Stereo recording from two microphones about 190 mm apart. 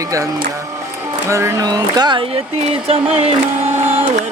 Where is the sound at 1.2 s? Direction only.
15° right (ahead or behind).